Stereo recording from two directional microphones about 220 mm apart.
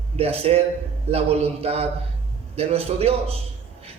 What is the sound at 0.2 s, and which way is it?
A man's voice, 25° right (ahead or behind).